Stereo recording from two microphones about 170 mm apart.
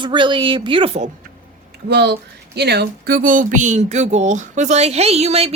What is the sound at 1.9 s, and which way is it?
Speech, 80° right.